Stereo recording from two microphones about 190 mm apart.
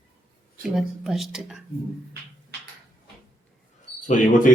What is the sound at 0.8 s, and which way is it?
Speech, centre (ahead or behind).